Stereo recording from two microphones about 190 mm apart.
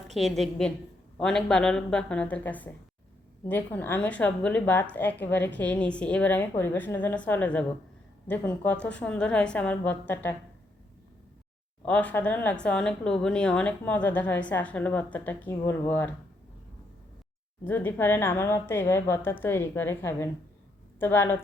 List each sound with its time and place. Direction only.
0.1 s a woman's voice: centre (ahead or behind)
11.9 s speech: 10° left (ahead or behind)
17.7 s speech: 10° left (ahead or behind)